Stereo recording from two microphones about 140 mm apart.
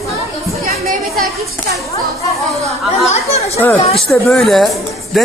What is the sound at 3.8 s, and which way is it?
Speech, 45° left (ahead or behind).